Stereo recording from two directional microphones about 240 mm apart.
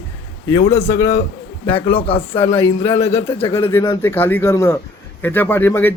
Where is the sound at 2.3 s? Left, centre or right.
Centre.